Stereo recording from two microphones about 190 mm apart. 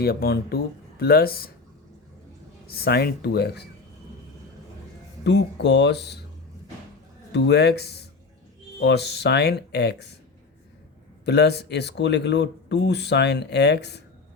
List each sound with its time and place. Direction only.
0.0 s speech: 55° left (ahead or behind)
2.6 s speech: 55° left (ahead or behind)
5.2 s speech: 65° left (ahead or behind)
7.3 s speech: 65° left (ahead or behind)
11.3 s speech: 60° left (ahead or behind)